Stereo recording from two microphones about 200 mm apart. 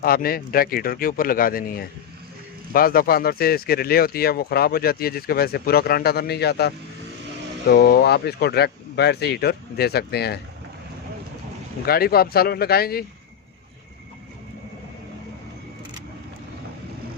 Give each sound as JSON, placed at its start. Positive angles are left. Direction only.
{"t": 0.0, "sound": "speech", "side_deg": 50}
{"t": 11.9, "sound": "speech", "side_deg": 50}